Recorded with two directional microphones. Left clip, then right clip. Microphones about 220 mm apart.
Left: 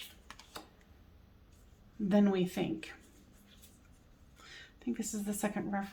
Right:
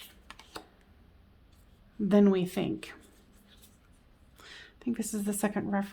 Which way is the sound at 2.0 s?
50° right (ahead or behind).